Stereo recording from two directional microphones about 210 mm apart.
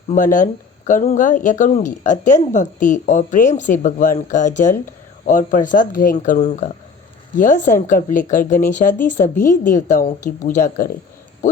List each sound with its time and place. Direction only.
0.1 s speech: 35° left (ahead or behind)